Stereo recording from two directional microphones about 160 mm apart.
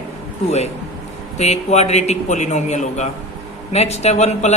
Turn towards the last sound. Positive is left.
turn(degrees=45)  # may be behind; listen again after turning